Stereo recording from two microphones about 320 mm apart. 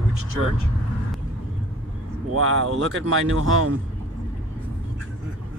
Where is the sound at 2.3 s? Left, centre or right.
Right.